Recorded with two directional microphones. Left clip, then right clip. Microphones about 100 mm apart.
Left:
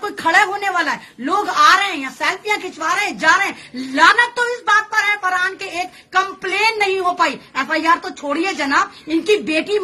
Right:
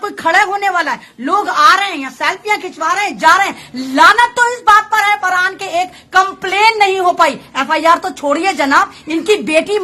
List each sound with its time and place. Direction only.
0.0 s a woman's voice: 25° right (ahead or behind)